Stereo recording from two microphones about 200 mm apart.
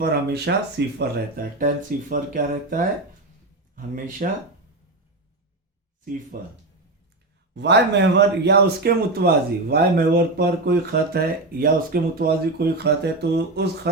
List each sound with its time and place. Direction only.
0.0 s speech: 55° right (ahead or behind)
0.9 s speech: 45° right (ahead or behind)
6.3 s speech: 45° right (ahead or behind)
7.5 s speech: 60° right (ahead or behind)